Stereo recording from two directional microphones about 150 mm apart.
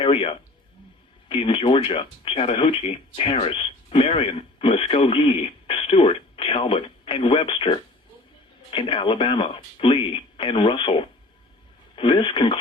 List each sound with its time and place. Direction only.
0.0 s a man's voice: 35° left (ahead or behind)